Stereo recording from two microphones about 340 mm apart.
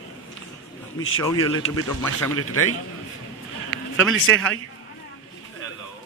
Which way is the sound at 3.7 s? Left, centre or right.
Right.